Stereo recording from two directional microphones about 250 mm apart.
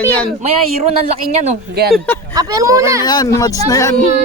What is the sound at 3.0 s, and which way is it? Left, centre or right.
Speech, centre.